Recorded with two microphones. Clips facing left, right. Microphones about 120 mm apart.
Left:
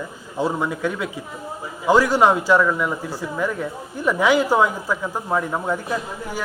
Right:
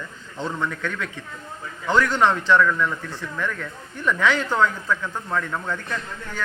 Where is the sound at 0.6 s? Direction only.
10° left (ahead or behind).